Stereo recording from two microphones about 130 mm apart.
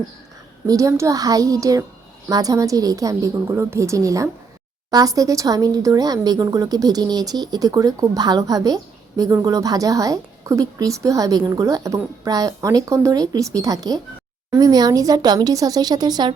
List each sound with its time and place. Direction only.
0.7 s speech: 25° right (ahead or behind)